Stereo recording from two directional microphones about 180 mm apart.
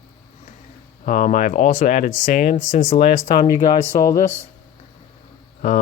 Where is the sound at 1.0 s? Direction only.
45° left (ahead or behind).